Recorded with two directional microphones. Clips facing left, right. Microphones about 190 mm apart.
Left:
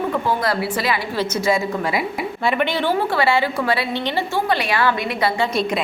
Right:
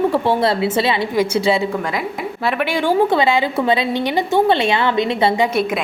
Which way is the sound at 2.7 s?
15° right (ahead or behind).